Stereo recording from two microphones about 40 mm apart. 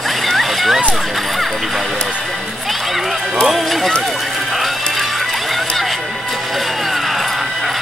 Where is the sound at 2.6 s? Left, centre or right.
Centre.